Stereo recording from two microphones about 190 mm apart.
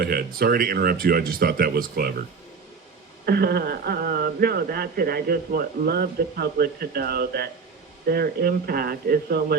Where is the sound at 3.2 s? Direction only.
55° right (ahead or behind).